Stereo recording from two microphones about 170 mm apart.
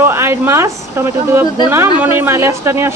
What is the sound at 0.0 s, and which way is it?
A woman's voice, 15° right (ahead or behind).